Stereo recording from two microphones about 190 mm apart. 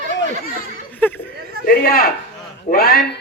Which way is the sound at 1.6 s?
50° left (ahead or behind).